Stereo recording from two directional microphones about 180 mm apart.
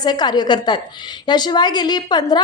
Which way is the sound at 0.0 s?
25° left (ahead or behind).